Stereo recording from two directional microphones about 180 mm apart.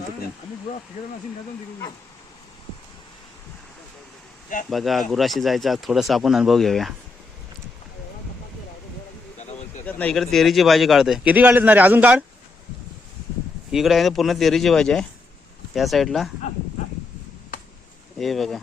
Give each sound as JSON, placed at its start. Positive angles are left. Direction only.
{"t": 1.0, "sound": "speech", "side_deg": 45}
{"t": 4.7, "sound": "speech", "side_deg": 0}
{"t": 9.5, "sound": "a sound", "side_deg": 40}
{"t": 9.8, "sound": "speech", "side_deg": 5}
{"t": 13.7, "sound": "speech", "side_deg": 0}
{"t": 18.2, "sound": "speech", "side_deg": 0}